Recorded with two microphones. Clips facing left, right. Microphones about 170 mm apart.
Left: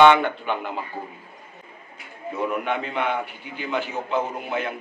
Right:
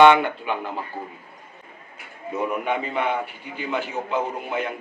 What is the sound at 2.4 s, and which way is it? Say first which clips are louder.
A man's voice: even; 5° right (ahead or behind).